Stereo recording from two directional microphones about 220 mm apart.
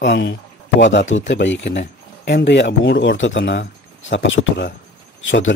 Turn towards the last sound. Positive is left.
turn(degrees=60)  # may be behind; listen again after turning